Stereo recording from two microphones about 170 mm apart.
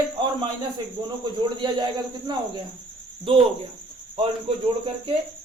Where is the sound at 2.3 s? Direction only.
25° right (ahead or behind).